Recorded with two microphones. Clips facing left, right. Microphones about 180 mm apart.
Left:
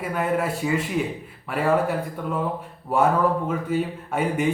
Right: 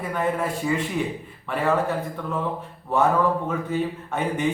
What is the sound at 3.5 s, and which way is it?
Speech, 10° left (ahead or behind).